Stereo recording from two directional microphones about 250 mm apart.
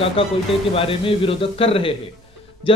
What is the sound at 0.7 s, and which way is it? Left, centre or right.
Speech, left.